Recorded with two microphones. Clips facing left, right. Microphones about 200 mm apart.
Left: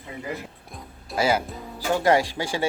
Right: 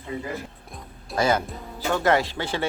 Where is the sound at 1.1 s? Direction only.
10° left (ahead or behind).